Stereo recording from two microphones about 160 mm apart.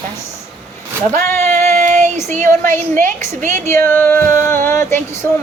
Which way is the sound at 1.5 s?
50° right (ahead or behind).